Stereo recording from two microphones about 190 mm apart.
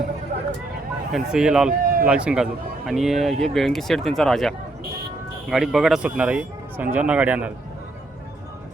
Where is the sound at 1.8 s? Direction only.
50° right (ahead or behind).